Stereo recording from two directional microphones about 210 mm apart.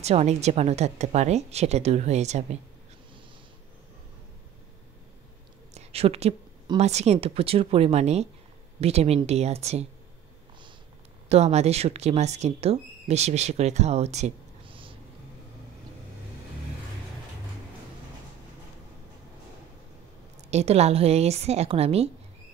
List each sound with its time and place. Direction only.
0.0 s speech: 30° right (ahead or behind)
5.8 s speech: 30° right (ahead or behind)
11.2 s speech: 30° right (ahead or behind)
20.4 s speech: 30° right (ahead or behind)